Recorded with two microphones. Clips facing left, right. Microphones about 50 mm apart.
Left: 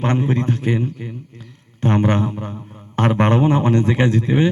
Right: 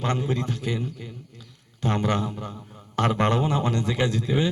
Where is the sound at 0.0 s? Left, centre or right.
Left.